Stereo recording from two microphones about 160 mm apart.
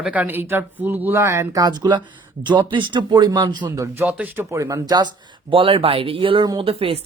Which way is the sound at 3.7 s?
15° right (ahead or behind).